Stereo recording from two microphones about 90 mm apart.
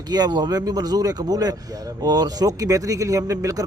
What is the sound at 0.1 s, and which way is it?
Speech, 50° right (ahead or behind).